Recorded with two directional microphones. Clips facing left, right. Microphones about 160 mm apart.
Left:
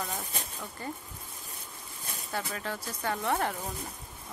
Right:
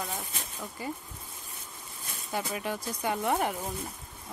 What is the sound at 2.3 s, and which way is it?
Speech, 15° right (ahead or behind).